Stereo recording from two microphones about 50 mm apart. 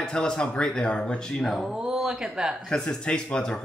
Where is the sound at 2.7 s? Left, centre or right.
Centre.